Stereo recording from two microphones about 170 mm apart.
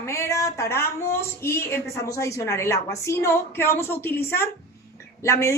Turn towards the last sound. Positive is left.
turn(degrees=15)  # may be behind; listen again after turning